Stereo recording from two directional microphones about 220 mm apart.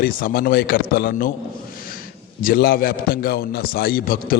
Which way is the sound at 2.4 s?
45° left (ahead or behind).